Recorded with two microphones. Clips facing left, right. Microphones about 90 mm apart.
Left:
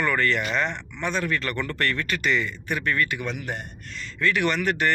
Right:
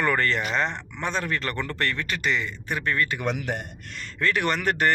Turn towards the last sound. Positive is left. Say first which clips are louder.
# even
turn(degrees=-45)  # may be behind; listen again after turning